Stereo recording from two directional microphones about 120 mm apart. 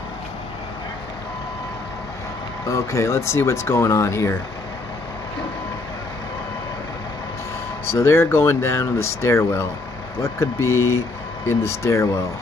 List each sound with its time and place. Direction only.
2.6 s speech: 25° left (ahead or behind)
7.8 s speech: 20° left (ahead or behind)